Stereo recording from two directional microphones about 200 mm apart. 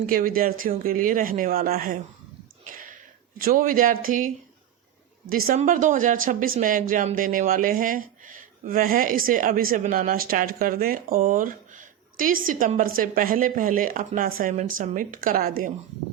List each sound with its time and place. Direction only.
0.0 s speech: 45° right (ahead or behind)
2.6 s a sound: 45° right (ahead or behind)
5.5 s speech: 40° right (ahead or behind)